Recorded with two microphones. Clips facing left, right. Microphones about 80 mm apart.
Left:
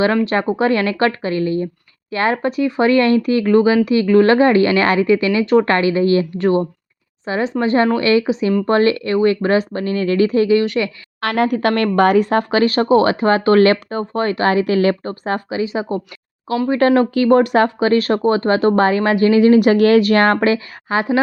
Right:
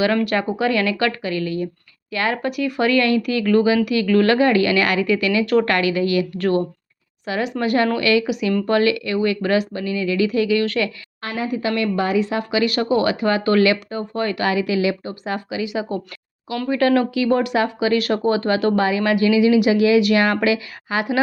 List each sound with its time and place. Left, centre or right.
0.0 s a woman's voice: left
11.2 s speech: left